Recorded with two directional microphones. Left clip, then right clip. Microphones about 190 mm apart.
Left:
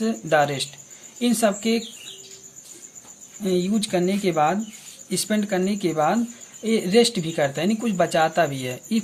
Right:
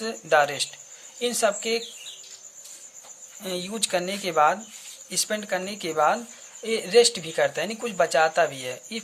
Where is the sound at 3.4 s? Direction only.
20° right (ahead or behind).